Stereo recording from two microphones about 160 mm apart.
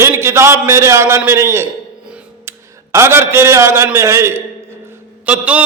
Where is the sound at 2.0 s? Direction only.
10° right (ahead or behind).